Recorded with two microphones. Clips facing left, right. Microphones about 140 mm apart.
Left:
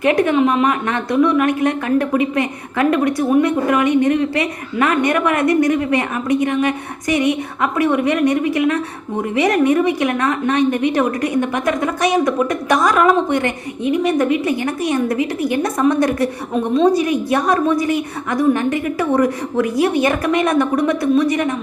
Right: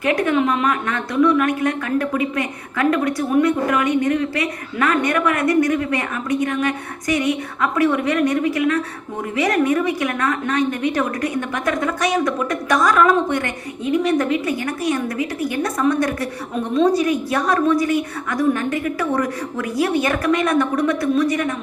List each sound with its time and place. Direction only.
0.0 s speech: 20° left (ahead or behind)